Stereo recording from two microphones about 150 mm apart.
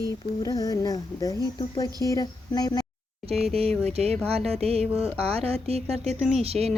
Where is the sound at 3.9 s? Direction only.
45° right (ahead or behind).